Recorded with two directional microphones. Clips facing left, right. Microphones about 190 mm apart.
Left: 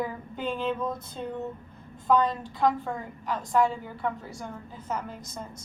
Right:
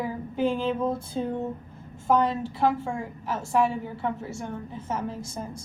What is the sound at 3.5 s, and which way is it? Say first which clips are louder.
A woman's voice: right 1 dB; 25° right (ahead or behind).